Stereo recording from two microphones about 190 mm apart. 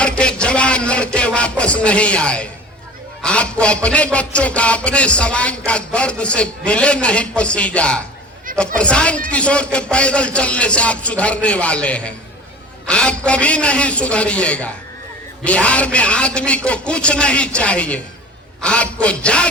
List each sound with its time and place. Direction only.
0.0 s music: 5° left (ahead or behind)
3.2 s a man's voice: 5° left (ahead or behind)
3.8 s music: 5° left (ahead or behind)
8.5 s a sound: 45° right (ahead or behind)
8.8 s a man's voice: 5° left (ahead or behind)
9.3 s music: 5° left (ahead or behind)